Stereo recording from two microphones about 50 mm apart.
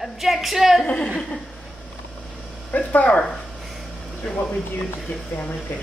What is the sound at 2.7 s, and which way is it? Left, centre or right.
Speech, left.